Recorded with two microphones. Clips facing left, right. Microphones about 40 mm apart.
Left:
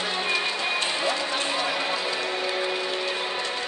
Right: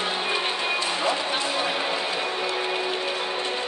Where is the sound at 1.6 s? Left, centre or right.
Right.